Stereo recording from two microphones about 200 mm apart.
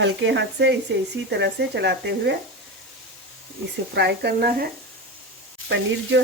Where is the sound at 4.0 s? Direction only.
55° right (ahead or behind).